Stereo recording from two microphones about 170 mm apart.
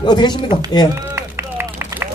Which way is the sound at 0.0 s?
25° left (ahead or behind).